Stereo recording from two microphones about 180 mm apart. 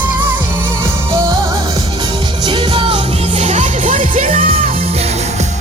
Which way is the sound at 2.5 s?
30° right (ahead or behind).